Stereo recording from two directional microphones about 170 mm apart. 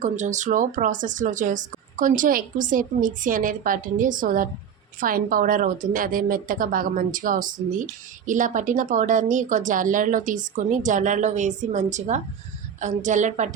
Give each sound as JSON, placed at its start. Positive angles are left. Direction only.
{"t": 0.0, "sound": "speech", "side_deg": -45}